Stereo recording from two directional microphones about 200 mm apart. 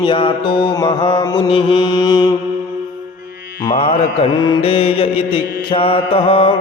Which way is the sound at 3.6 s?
30° left (ahead or behind).